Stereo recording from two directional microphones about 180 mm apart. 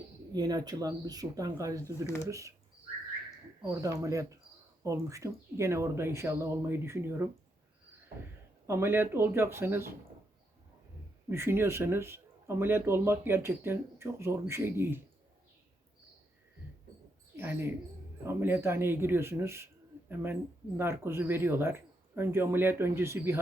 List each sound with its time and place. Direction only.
0.3 s speech: 20° right (ahead or behind)
1.8 s speech: 15° left (ahead or behind)
2.2 s speech: 15° right (ahead or behind)
3.6 s speech: 20° right (ahead or behind)
8.6 s speech: 15° right (ahead or behind)
11.3 s speech: 15° right (ahead or behind)
17.3 s speech: 15° right (ahead or behind)
20.7 s speech: 15° right (ahead or behind)